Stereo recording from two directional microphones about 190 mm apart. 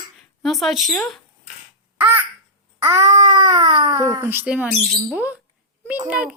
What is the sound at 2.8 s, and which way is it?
Speech, 15° right (ahead or behind).